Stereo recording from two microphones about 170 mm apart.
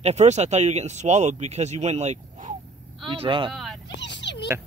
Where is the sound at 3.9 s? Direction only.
90° left.